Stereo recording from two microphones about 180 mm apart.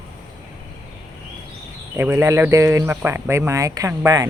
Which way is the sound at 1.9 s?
10° right (ahead or behind).